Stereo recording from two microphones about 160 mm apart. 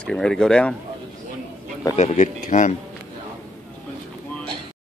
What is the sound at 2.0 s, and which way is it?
Speech, 50° left (ahead or behind).